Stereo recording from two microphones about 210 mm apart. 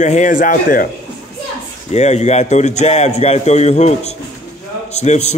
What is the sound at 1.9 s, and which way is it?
A man's voice, 30° left (ahead or behind).